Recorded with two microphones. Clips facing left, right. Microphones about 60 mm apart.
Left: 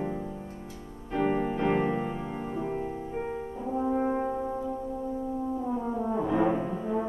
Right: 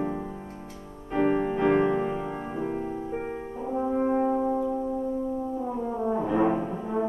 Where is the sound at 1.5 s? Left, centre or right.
Right.